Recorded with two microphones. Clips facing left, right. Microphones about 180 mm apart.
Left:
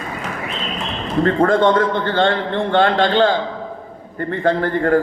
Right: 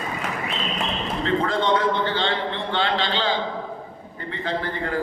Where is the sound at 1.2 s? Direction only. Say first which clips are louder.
Left 9 dB; 50° left (ahead or behind).